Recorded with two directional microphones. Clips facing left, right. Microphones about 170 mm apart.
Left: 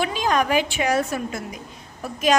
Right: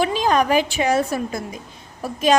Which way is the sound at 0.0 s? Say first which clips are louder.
Right 3 dB; 35° right (ahead or behind).